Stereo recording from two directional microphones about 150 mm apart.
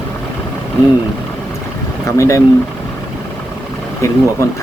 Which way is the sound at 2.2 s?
20° left (ahead or behind).